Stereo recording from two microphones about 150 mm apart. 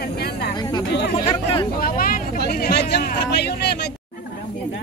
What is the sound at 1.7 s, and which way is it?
Speech, 75° left (ahead or behind).